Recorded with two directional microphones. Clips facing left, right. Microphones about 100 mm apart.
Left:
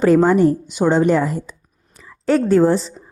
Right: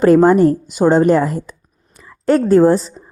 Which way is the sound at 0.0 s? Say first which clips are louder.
Right 3 dB; 45° right (ahead or behind).